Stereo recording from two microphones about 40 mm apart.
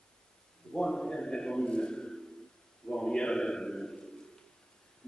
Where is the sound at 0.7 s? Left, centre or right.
Centre.